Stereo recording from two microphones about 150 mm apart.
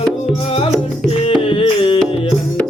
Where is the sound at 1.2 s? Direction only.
35° left (ahead or behind).